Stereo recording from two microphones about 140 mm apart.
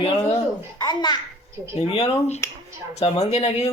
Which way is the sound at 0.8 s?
30° left (ahead or behind).